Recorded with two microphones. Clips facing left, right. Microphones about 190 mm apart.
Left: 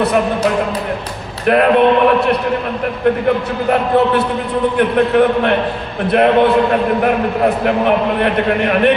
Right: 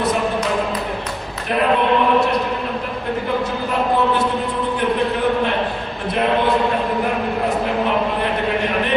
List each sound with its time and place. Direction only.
4.7 s a man's voice: 60° left (ahead or behind)
8.2 s a man's voice: 65° left (ahead or behind)